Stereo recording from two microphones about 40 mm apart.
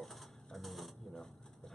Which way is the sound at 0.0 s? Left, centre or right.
Centre.